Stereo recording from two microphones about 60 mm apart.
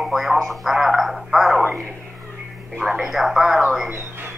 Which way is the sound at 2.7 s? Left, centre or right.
Centre.